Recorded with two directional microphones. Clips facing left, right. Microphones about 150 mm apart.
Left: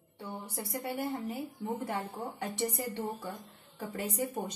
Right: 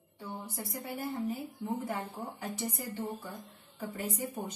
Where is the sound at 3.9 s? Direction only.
85° left.